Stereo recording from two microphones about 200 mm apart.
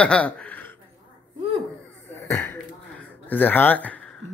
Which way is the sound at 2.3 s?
10° left (ahead or behind).